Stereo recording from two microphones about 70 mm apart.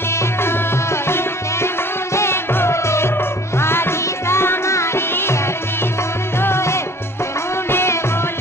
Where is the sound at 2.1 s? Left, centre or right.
Left.